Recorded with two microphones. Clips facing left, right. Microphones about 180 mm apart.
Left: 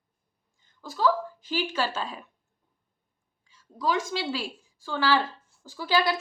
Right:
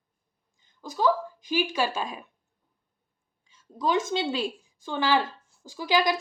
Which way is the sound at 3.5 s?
20° right (ahead or behind).